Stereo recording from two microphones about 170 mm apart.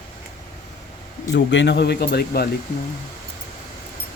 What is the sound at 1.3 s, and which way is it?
Speech, 90° left.